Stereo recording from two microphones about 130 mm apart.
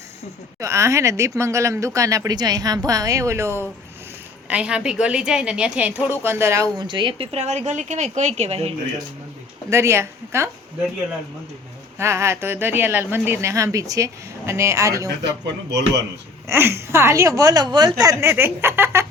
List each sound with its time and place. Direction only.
0.6 s speech: 20° right (ahead or behind)
4.4 s a woman's voice: 10° right (ahead or behind)
6.7 s a woman's voice: 40° right (ahead or behind)
9.6 s speech: 20° right (ahead or behind)
11.9 s speech: 20° right (ahead or behind)
16.5 s speech: 20° right (ahead or behind)